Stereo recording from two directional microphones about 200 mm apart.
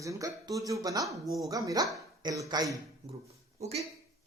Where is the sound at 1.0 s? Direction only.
Centre (ahead or behind).